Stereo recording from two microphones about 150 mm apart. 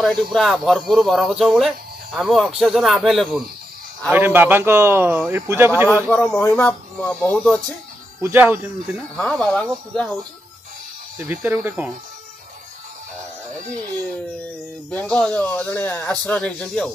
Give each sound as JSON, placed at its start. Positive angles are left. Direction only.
{"t": 0.0, "sound": "speech", "side_deg": 0}
{"t": 4.1, "sound": "a man's voice", "side_deg": -15}
{"t": 6.0, "sound": "speech", "side_deg": 10}
{"t": 8.2, "sound": "a man's voice", "side_deg": -15}
{"t": 9.1, "sound": "speech", "side_deg": 5}
{"t": 11.1, "sound": "a man's voice", "side_deg": -15}
{"t": 14.9, "sound": "speech", "side_deg": 10}